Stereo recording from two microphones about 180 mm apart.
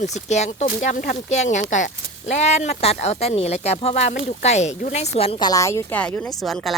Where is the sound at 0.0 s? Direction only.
40° left (ahead or behind).